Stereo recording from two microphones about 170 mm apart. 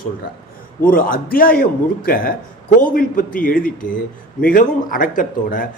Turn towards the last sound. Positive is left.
turn(degrees=55)  # may be behind; listen again after turning